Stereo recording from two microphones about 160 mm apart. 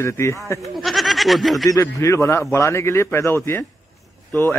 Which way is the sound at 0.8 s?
Centre (ahead or behind).